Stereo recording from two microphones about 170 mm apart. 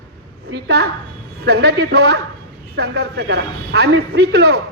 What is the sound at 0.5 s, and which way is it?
A man's voice, 75° right (ahead or behind).